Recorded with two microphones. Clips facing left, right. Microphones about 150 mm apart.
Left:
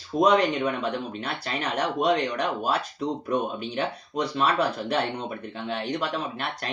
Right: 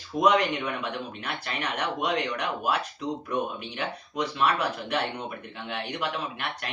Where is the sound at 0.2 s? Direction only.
30° left (ahead or behind).